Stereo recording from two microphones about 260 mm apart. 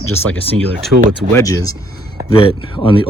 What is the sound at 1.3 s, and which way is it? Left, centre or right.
Speech, centre.